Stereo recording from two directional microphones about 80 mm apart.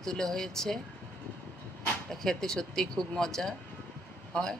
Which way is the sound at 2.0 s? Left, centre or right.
Centre.